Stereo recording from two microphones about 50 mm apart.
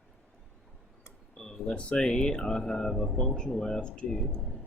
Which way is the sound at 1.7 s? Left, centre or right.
Centre.